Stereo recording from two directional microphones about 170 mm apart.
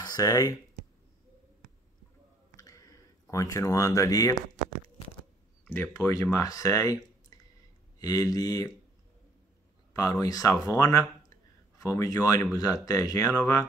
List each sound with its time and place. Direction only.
0.0 s speech: 20° left (ahead or behind)
2.5 s a sound: 20° left (ahead or behind)
5.7 s speech: 15° left (ahead or behind)
9.9 s speech: 20° left (ahead or behind)